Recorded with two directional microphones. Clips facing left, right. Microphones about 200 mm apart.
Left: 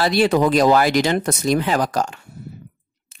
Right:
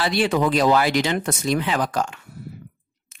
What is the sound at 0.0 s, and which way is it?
Speech, 40° left (ahead or behind).